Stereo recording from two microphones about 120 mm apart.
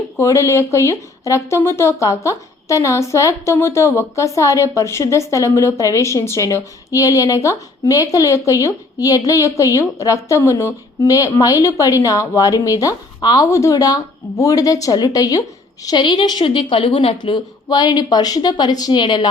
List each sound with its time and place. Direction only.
0.2 s a woman's voice: 25° left (ahead or behind)